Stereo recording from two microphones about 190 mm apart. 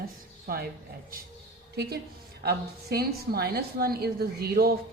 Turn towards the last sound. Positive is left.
turn(degrees=-50)  # may be behind; listen again after turning